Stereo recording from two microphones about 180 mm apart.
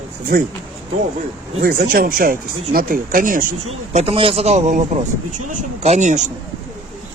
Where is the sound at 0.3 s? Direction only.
55° right (ahead or behind).